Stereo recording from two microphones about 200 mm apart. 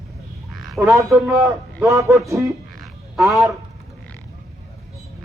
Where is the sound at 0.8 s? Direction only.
15° right (ahead or behind).